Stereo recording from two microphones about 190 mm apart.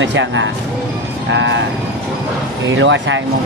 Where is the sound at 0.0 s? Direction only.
75° right (ahead or behind).